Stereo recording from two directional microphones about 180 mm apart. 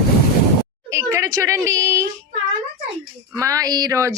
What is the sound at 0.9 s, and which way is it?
A woman's voice, 15° right (ahead or behind).